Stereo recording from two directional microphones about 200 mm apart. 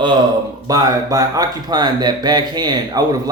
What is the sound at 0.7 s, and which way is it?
Speech, 20° right (ahead or behind).